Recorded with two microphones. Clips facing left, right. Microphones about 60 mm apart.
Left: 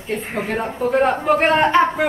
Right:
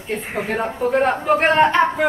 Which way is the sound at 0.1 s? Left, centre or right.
Centre.